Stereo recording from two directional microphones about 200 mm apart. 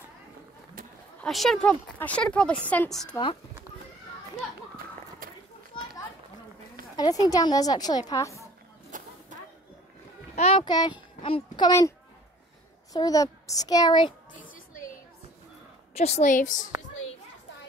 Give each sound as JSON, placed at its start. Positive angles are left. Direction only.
{"t": 1.2, "sound": "speech", "side_deg": 0}
{"t": 7.0, "sound": "a child's voice", "side_deg": 20}
{"t": 8.9, "sound": "a sound", "side_deg": -40}
{"t": 10.3, "sound": "a child's voice", "side_deg": 30}
{"t": 12.9, "sound": "a child's voice", "side_deg": 15}
{"t": 14.5, "sound": "a sound", "side_deg": 45}
{"t": 16.0, "sound": "a woman's voice", "side_deg": 35}